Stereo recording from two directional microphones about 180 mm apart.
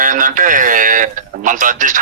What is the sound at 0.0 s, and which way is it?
A man's voice, 50° right (ahead or behind).